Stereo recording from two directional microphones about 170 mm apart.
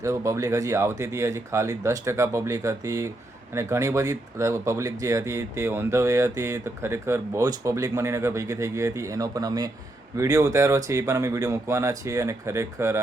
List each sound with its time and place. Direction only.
0.0 s speech: 15° right (ahead or behind)